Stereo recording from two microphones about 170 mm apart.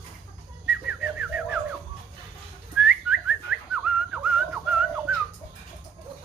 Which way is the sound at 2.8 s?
5° right (ahead or behind).